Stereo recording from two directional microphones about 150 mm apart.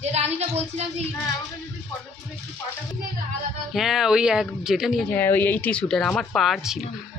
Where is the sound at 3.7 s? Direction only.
Centre (ahead or behind).